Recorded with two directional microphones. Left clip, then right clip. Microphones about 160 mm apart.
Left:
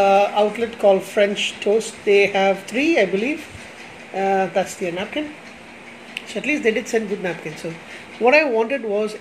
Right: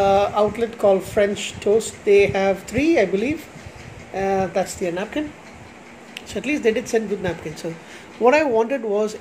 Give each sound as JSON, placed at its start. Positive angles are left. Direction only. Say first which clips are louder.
{"t": 0.0, "sound": "speech", "louder": "left 2 dB", "side_deg": -10}
{"t": 4.8, "sound": "speech", "louder": "even", "side_deg": -20}